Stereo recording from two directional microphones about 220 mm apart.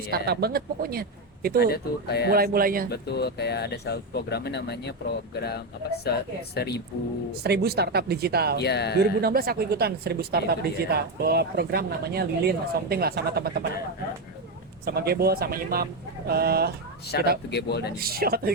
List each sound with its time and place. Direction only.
0.3 s a woman's voice: 45° right (ahead or behind)
1.5 s speech: 45° left (ahead or behind)
2.3 s speech: 45° right (ahead or behind)
2.9 s speech: 50° left (ahead or behind)
6.1 s speech: 45° left (ahead or behind)
7.4 s a woman's voice: 45° right (ahead or behind)
8.5 s speech: 50° left (ahead or behind)
9.0 s a woman's voice: 45° right (ahead or behind)
14.8 s a woman's voice: 45° right (ahead or behind)
17.1 s speech: 50° left (ahead or behind)
17.9 s a woman's voice: 45° right (ahead or behind)